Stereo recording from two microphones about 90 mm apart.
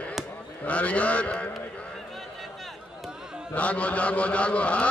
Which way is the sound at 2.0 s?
Centre (ahead or behind).